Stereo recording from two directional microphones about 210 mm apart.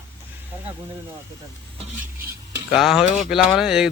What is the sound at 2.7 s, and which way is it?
Speech, centre (ahead or behind).